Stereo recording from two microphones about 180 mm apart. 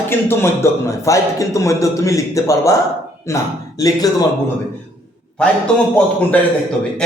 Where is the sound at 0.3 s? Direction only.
15° left (ahead or behind).